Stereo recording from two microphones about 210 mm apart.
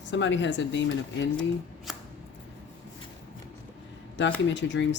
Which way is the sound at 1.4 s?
Centre (ahead or behind).